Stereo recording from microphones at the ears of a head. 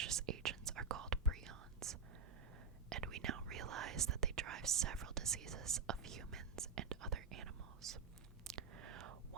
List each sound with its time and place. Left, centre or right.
0.0 s whispering: right